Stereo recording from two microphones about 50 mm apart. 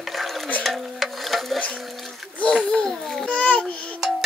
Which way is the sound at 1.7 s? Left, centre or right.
Centre.